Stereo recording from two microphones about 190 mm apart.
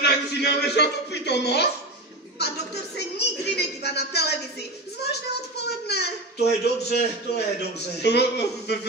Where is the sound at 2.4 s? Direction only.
60° left (ahead or behind).